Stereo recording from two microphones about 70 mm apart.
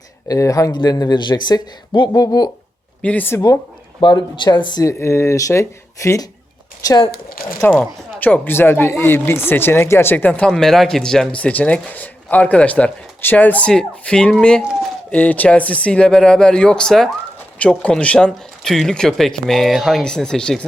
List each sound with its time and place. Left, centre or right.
0.3 s speech: left
0.7 s speech: left
3.0 s speech: centre
4.1 s speech: left
4.9 s speech: left
7.6 s speech: centre
10.4 s speech: centre
15.1 s speech: left
18.3 s speech: centre
20.0 s speech: centre